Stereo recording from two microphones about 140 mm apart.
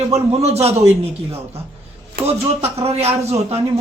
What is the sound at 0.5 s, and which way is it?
Speech, 50° right (ahead or behind).